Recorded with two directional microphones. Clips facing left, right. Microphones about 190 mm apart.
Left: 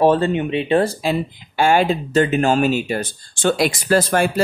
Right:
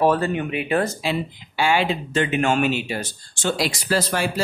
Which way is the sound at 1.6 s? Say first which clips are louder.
Left 5 dB; 45° left (ahead or behind).